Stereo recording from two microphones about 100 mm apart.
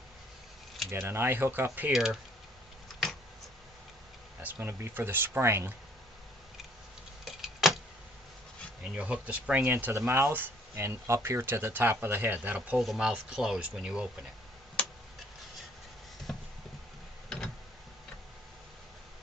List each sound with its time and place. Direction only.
0.9 s speech: 25° right (ahead or behind)
1.9 s speech: 5° right (ahead or behind)
4.6 s speech: 25° right (ahead or behind)
7.3 s vehicle: 5° right (ahead or behind)
9.0 s speech: 10° right (ahead or behind)
12.7 s speech: 5° right (ahead or behind)
16.3 s a sound: 5° left (ahead or behind)